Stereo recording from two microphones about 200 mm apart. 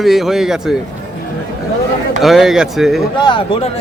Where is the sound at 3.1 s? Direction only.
25° left (ahead or behind).